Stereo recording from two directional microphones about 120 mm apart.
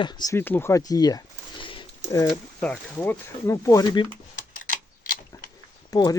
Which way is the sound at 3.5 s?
25° left (ahead or behind).